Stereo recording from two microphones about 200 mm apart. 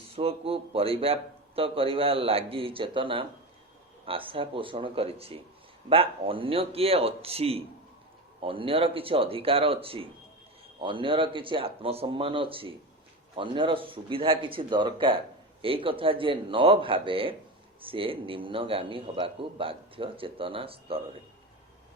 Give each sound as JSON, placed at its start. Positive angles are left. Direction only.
{"t": 0.2, "sound": "a man's voice", "side_deg": -30}